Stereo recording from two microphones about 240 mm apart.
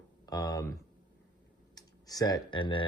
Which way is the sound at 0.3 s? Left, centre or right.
Centre.